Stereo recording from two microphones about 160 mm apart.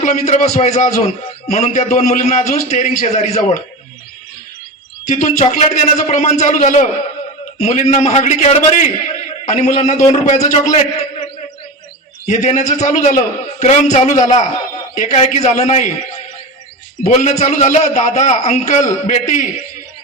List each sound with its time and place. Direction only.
0.0 s a man's voice: 45° left (ahead or behind)
5.0 s a man's voice: 50° left (ahead or behind)
12.2 s a man's voice: 45° left (ahead or behind)
17.0 s a man's voice: 45° left (ahead or behind)